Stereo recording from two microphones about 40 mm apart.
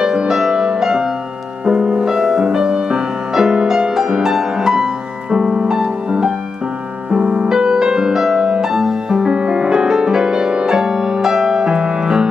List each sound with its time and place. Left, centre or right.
0.0 s music: centre
2.1 s music: centre